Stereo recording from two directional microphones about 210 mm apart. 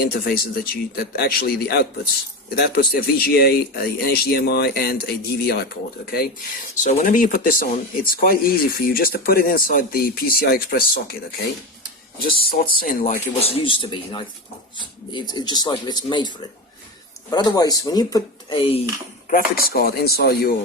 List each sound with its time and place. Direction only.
0.0 s speech: 45° left (ahead or behind)
12.2 s speech: 45° left (ahead or behind)
13.4 s speech: 25° left (ahead or behind)
17.3 s speech: 20° left (ahead or behind)
19.3 s speech: 45° left (ahead or behind)